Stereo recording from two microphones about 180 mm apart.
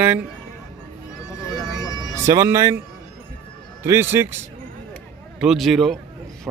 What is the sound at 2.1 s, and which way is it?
Speech, 15° right (ahead or behind).